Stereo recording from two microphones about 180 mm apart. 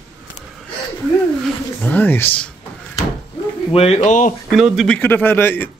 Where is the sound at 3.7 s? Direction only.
35° left (ahead or behind).